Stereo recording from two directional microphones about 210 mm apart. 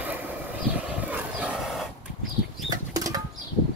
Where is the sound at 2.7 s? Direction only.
15° right (ahead or behind).